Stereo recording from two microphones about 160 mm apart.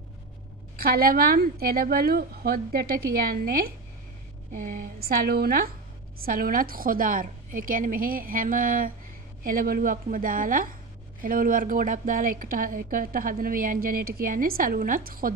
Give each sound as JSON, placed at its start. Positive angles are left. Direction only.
{"t": 0.7, "sound": "a woman's voice", "side_deg": -65}
{"t": 4.5, "sound": "a woman's voice", "side_deg": -55}